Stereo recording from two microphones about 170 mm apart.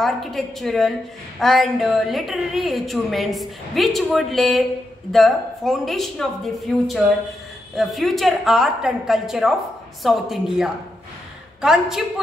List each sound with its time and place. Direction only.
0.0 s a woman's voice: centre (ahead or behind)